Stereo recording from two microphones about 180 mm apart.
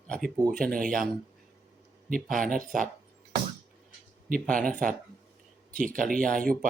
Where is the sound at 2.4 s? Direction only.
50° right (ahead or behind).